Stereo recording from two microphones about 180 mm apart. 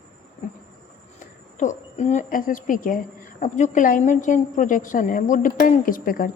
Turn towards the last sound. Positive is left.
turn(degrees=50)  # may be behind; listen again after turning